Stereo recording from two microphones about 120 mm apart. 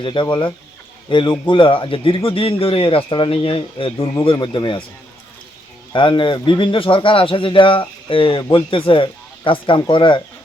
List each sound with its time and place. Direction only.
0.0 s a man's voice: 40° left (ahead or behind)
5.9 s a man's voice: 45° left (ahead or behind)